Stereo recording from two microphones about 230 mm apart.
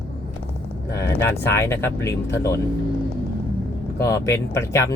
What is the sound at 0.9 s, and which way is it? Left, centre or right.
Speech, centre.